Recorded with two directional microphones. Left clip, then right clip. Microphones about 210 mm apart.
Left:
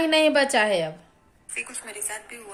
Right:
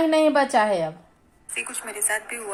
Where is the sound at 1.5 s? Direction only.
35° right (ahead or behind).